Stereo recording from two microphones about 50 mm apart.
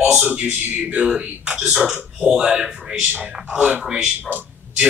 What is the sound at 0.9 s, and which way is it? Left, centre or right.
Speech, right.